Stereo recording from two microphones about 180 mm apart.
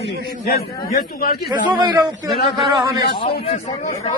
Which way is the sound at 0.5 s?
55° left (ahead or behind).